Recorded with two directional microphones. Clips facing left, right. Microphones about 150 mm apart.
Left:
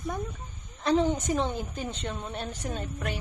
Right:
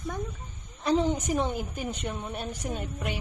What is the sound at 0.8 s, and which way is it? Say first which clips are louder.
A woman's voice: left 1 dB; 10° right (ahead or behind).